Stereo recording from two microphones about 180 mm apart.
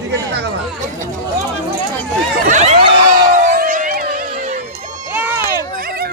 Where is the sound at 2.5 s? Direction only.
35° right (ahead or behind).